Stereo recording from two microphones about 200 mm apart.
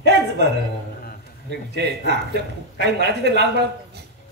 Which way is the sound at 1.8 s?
55° right (ahead or behind).